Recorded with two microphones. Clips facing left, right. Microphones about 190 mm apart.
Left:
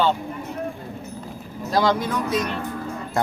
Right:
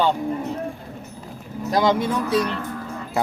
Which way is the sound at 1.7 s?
20° right (ahead or behind).